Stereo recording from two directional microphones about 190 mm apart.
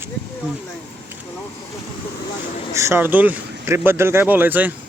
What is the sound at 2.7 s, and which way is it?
Speech, 15° right (ahead or behind).